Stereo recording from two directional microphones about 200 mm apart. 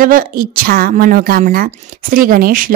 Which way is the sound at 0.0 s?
45° right (ahead or behind).